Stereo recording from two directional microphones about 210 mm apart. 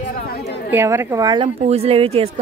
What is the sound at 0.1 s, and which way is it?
Chatter, 45° left (ahead or behind).